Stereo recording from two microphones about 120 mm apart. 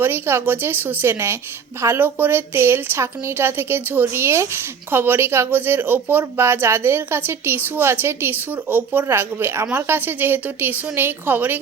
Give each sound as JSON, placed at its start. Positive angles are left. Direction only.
{"t": 0.0, "sound": "a woman's voice", "side_deg": -20}